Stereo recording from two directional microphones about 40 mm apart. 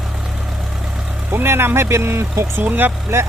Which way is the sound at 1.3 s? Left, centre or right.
Right.